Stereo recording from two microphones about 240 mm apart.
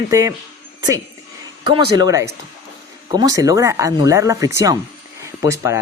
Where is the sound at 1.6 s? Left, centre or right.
Centre.